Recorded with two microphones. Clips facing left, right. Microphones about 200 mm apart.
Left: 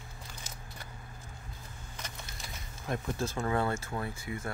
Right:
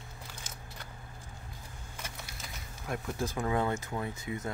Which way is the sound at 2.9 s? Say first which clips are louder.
Left 1 dB; 15° right (ahead or behind).